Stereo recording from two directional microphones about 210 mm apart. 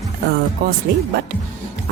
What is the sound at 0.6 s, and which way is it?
Speech, 45° right (ahead or behind).